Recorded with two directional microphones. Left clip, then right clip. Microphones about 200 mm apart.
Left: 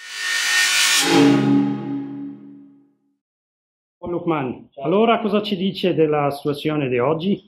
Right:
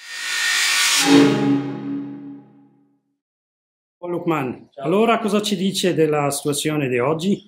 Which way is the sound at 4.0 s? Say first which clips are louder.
Even; 15° right (ahead or behind).